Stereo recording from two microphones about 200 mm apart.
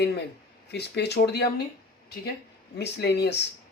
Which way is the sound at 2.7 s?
55° left (ahead or behind).